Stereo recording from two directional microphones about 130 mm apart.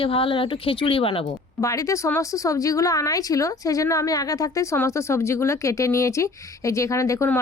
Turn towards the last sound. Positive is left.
turn(degrees=25)  # may be behind; listen again after turning